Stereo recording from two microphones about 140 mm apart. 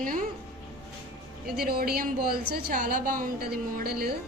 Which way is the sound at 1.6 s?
90° right.